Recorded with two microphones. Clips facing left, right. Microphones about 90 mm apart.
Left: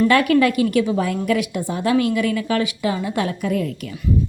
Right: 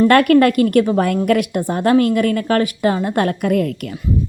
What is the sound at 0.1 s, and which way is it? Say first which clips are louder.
A woman's voice: right 4 dB; 55° right (ahead or behind).